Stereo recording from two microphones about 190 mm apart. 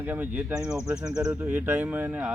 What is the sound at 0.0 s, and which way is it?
Speech, 10° right (ahead or behind).